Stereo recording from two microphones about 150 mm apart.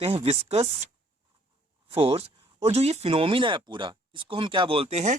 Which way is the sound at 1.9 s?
40° right (ahead or behind).